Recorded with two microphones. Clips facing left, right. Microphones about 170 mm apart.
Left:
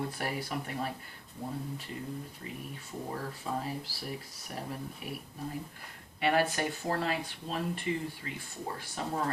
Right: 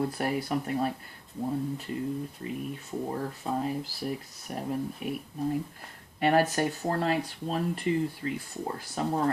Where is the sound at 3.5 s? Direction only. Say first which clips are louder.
Right 4 dB; 35° right (ahead or behind).